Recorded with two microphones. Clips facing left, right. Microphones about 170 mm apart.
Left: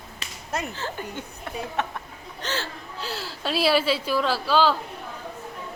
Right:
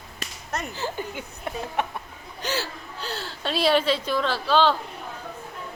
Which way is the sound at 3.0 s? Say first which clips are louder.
Even; centre (ahead or behind).